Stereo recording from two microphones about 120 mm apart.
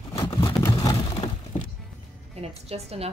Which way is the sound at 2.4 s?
55° right (ahead or behind).